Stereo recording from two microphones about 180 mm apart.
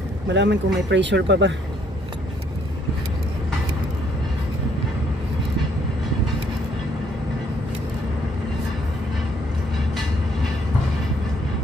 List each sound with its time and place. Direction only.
0.3 s speech: 75° right (ahead or behind)